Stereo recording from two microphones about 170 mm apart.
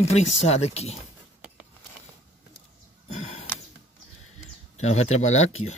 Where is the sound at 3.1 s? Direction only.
40° left (ahead or behind).